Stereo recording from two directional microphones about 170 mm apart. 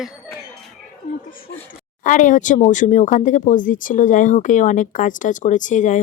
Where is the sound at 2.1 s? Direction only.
50° left (ahead or behind).